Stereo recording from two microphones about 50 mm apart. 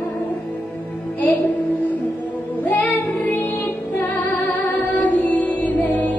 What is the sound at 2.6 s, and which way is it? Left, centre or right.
Music, left.